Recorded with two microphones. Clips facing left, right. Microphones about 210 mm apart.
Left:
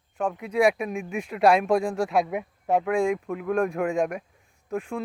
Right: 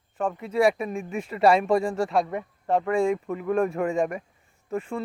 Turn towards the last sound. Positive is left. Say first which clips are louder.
# even
turn(degrees=0)  # may be behind; listen again after turning